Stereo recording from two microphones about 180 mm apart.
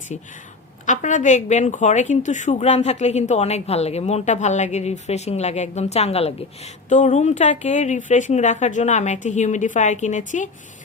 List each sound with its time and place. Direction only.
0.9 s a woman's voice: 45° left (ahead or behind)